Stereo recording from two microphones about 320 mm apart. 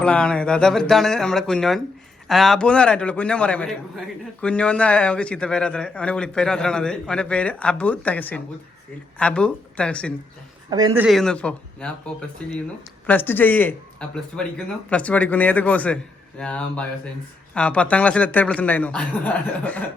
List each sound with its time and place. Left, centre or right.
0.0 s a man's voice: centre
10.7 s a man's voice: centre
13.1 s a man's voice: centre